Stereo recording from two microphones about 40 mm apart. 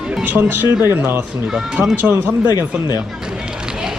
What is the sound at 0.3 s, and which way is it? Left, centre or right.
Speech, right.